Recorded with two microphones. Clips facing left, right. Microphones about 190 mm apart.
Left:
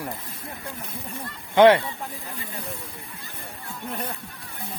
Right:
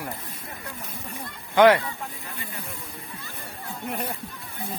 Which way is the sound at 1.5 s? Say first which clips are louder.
Left 2 dB; 25° left (ahead or behind).